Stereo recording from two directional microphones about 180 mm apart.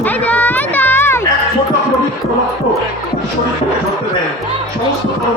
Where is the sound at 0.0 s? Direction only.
10° left (ahead or behind).